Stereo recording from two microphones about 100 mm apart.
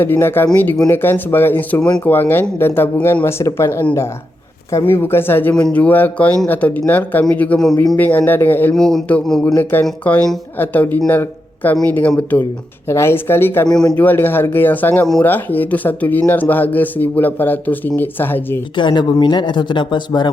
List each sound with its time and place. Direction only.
0.0 s speech: 25° left (ahead or behind)
8.7 s speech: 5° left (ahead or behind)
9.6 s speech: 20° left (ahead or behind)
13.7 s speech: 5° left (ahead or behind)
13.9 s speech: 20° left (ahead or behind)
18.8 s speech: 50° left (ahead or behind)